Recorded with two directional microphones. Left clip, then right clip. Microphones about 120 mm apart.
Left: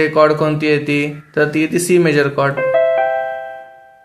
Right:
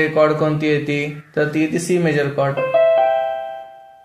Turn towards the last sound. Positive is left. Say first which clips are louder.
# even
turn(degrees=0)  # may be behind; listen again after turning